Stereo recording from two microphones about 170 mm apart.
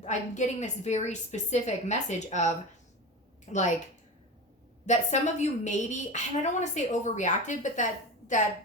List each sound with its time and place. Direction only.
0.0 s a woman's voice: 45° left (ahead or behind)
4.9 s a woman's voice: 45° left (ahead or behind)